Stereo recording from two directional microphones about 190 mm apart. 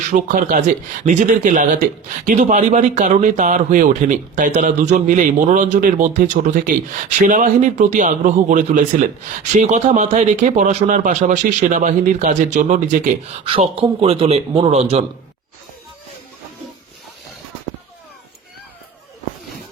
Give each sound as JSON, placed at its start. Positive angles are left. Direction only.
{"t": 0.1, "sound": "speech", "side_deg": -45}
{"t": 13.4, "sound": "speech", "side_deg": -30}